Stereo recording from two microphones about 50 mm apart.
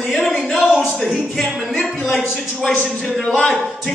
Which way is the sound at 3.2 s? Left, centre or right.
Left.